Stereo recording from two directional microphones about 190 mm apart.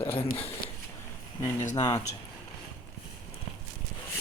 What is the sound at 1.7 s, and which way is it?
Speech, 20° left (ahead or behind).